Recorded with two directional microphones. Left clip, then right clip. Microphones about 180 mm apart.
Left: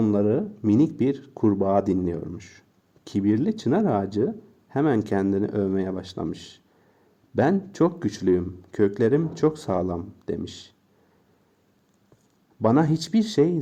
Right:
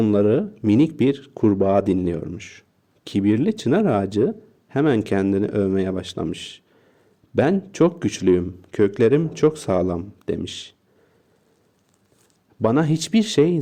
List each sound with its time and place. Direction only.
0.0 s a man's voice: 35° right (ahead or behind)
12.6 s a man's voice: 35° right (ahead or behind)